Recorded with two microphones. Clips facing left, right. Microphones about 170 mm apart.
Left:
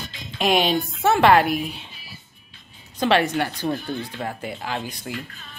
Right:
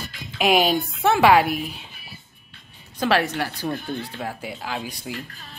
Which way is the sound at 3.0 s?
5° right (ahead or behind).